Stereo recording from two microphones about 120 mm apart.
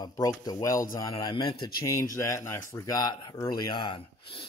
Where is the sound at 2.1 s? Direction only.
25° left (ahead or behind); by 4.4 s 45° left (ahead or behind).